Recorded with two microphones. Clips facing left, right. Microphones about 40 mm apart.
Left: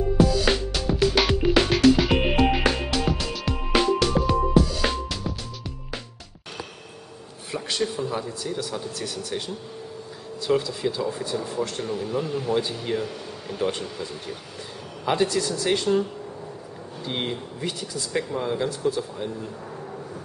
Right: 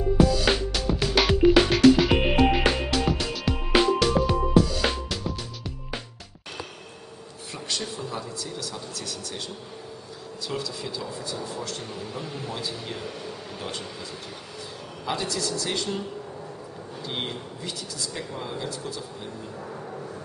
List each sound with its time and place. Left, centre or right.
0.4 s music: centre
7.5 s speech: centre
10.4 s speech: left
11.8 s speech: centre
12.5 s speech: centre
12.9 s speech: centre
15.0 s speech: left
17.0 s a man's voice: centre
17.6 s speech: left
18.3 s speech: centre